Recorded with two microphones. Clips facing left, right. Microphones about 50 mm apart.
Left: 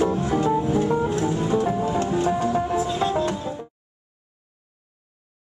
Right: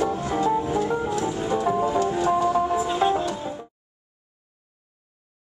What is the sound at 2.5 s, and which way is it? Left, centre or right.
Music, centre.